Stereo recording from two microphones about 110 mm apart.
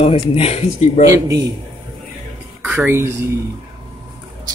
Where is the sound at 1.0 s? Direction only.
30° right (ahead or behind).